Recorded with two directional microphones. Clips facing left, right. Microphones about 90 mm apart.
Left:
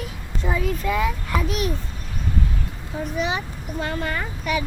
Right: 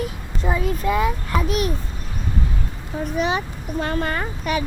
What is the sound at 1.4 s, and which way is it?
Speech, 50° right (ahead or behind).